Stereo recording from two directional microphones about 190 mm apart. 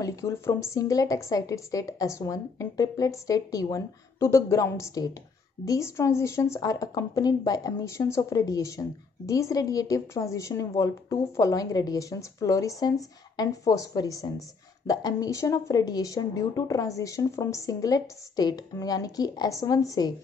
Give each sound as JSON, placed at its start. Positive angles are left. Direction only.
{"t": 0.0, "sound": "a woman's voice", "side_deg": 15}